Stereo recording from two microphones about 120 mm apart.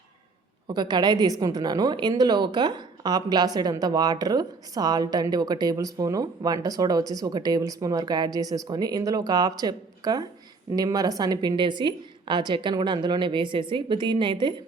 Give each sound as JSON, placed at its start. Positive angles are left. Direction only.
{"t": 0.7, "sound": "a woman's voice", "side_deg": -35}